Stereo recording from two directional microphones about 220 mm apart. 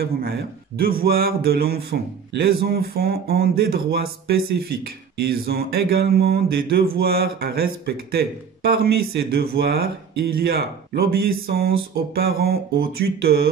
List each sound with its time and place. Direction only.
0.0 s mantra: 45° right (ahead or behind)